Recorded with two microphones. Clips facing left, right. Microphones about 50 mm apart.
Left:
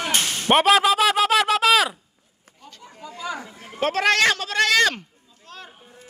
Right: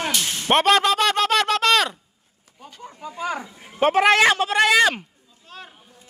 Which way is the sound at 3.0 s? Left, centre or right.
Right.